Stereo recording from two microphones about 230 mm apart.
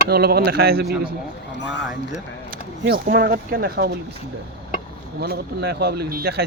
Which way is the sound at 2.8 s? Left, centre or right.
Right.